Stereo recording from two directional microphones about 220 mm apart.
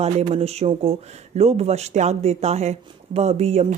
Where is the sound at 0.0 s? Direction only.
30° right (ahead or behind).